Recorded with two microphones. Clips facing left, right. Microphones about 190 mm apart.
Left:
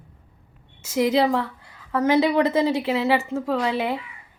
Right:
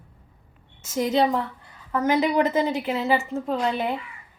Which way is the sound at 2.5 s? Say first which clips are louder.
Left 3 dB; 30° left (ahead or behind).